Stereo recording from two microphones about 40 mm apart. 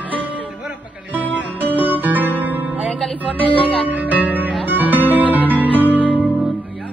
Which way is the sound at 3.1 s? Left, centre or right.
Right.